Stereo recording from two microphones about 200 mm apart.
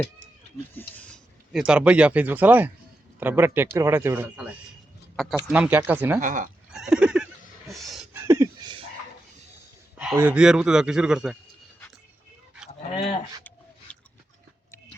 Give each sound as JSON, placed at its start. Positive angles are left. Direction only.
{"t": 0.7, "sound": "speech", "side_deg": 10}
{"t": 6.1, "sound": "speech", "side_deg": -40}
{"t": 6.7, "sound": "a sound", "side_deg": -5}
{"t": 8.1, "sound": "a sound", "side_deg": -15}
{"t": 10.2, "sound": "a man's voice", "side_deg": -5}
{"t": 13.9, "sound": "dog", "side_deg": 5}